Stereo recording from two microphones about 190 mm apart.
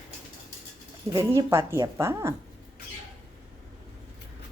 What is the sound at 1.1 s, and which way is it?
Speech, 15° right (ahead or behind).